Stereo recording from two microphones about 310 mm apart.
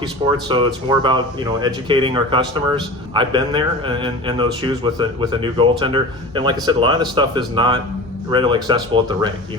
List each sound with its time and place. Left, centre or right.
0.0 s a man's voice: centre